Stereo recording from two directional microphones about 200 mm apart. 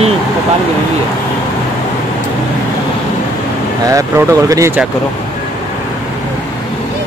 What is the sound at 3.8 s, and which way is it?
Speech, 15° right (ahead or behind).